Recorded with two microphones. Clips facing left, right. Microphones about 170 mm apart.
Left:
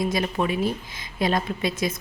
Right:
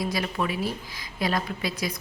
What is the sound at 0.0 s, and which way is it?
A woman's voice, 20° left (ahead or behind).